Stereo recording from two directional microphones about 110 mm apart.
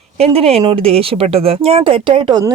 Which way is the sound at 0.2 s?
65° right (ahead or behind).